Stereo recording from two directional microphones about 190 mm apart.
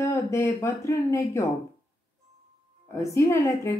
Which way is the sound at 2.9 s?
15° left (ahead or behind).